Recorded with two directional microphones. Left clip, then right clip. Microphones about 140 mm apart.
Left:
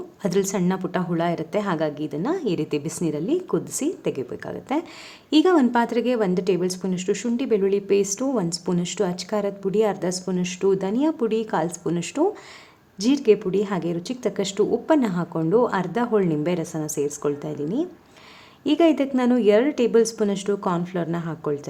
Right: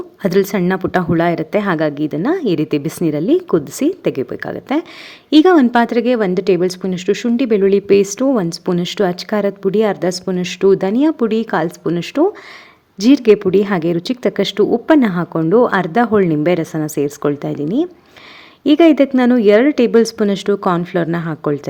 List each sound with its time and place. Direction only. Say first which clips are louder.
0.2 s a woman's voice: right 8 dB; 25° right (ahead or behind)